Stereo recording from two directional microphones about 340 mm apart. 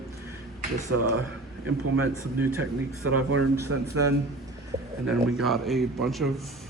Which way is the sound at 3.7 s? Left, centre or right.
Right.